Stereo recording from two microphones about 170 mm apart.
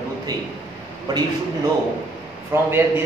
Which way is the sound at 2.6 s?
10° right (ahead or behind).